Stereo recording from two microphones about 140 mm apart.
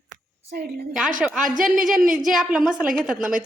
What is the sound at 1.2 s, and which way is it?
A woman's voice, 5° right (ahead or behind).